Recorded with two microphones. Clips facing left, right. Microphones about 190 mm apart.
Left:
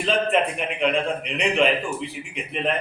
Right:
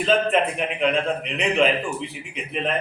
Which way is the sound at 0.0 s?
Centre (ahead or behind).